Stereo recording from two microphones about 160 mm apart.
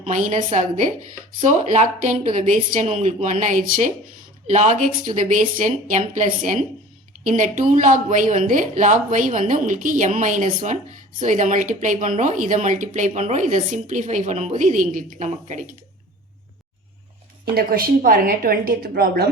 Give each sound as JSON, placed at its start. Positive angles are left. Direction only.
{"t": 0.0, "sound": "a woman's voice", "side_deg": -50}
{"t": 17.5, "sound": "a woman's voice", "side_deg": -65}